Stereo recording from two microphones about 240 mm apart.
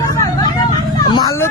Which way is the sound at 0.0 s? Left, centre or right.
Centre.